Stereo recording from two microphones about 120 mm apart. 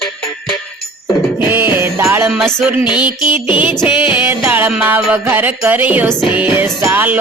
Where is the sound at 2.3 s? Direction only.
5° right (ahead or behind).